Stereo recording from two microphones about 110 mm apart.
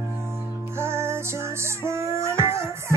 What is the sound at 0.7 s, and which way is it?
Music, 25° right (ahead or behind).